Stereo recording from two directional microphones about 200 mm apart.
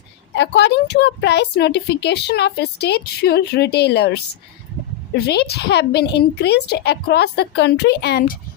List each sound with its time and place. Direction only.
0.3 s a woman's voice: 60° left (ahead or behind)